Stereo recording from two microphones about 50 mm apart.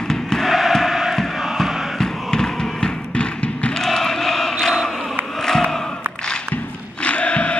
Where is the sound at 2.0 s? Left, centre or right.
Centre.